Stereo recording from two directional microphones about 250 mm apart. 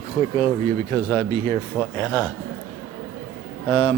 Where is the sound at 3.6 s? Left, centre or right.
Left.